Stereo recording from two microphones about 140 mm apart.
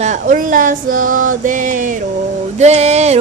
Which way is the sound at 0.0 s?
65° right (ahead or behind).